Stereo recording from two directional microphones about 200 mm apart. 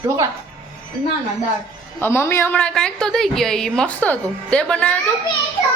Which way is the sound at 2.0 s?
10° left (ahead or behind).